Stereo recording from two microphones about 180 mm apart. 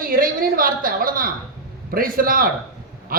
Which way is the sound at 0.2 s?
50° right (ahead or behind).